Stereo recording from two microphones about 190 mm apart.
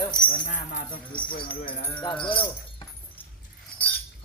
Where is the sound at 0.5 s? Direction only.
45° left (ahead or behind).